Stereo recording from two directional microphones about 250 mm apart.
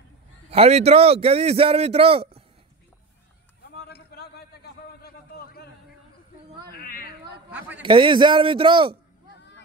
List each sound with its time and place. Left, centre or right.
0.5 s a man's voice: right
3.9 s a sound: left
7.8 s a man's voice: centre